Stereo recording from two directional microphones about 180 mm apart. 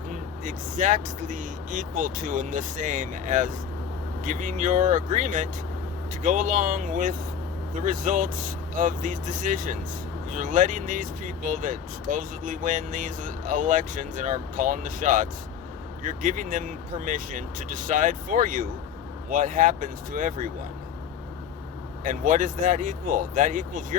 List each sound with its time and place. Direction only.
0.4 s speech: 45° right (ahead or behind)
22.0 s speech: 45° right (ahead or behind)